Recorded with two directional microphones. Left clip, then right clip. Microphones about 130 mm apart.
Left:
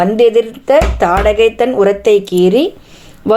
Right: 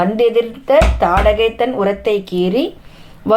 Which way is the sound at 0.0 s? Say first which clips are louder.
Left 4 dB; 40° left (ahead or behind).